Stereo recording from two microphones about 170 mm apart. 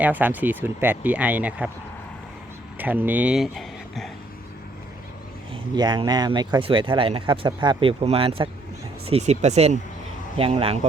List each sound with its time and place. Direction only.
0.0 s speech: 10° right (ahead or behind)
2.7 s speech: 10° right (ahead or behind)
5.7 s speech: 25° right (ahead or behind)